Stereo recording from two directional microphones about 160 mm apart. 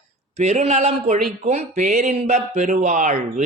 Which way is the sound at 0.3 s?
45° right (ahead or behind).